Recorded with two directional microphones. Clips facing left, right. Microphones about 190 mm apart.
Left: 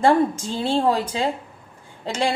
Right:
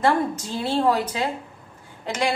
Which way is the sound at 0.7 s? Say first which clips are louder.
Left 1 dB; 30° left (ahead or behind).